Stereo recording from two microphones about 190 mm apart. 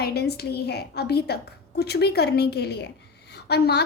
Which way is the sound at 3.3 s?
60° left (ahead or behind).